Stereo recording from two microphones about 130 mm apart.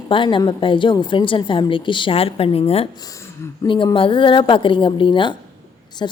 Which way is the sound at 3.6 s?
40° left (ahead or behind).